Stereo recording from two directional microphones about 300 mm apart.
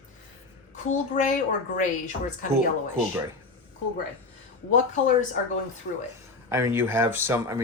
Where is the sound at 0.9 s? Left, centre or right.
Left.